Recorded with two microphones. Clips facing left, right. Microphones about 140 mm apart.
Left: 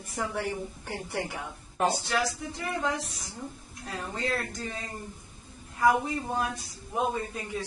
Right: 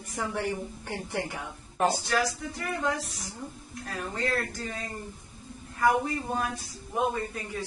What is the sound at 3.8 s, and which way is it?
Speech, 15° left (ahead or behind).